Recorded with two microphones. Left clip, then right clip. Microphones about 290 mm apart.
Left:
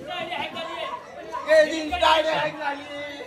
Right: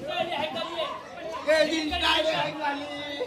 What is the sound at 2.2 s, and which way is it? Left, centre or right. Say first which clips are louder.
Speech: left 2 dB; centre.